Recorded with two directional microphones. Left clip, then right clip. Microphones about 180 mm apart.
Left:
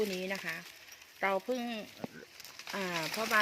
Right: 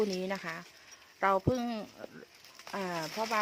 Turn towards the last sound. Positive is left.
turn(degrees=0)  # may be behind; listen again after turning